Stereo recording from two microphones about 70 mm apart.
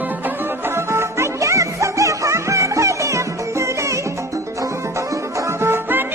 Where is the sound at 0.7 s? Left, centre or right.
Right.